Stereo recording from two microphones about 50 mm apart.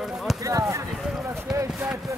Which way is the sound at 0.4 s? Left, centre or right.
Right.